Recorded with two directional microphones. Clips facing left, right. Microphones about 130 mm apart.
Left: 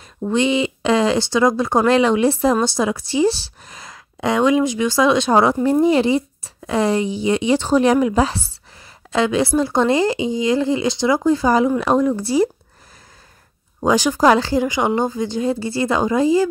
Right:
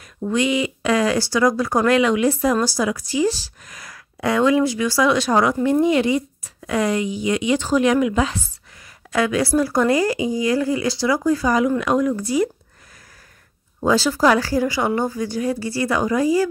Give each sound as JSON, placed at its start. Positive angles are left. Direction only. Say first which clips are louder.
{"t": 0.3, "sound": "speech", "louder": "left 2 dB", "side_deg": 25}
{"t": 13.7, "sound": "speech", "louder": "left 1 dB", "side_deg": 15}